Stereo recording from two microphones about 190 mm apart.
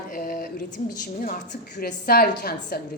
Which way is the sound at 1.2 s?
50° left (ahead or behind).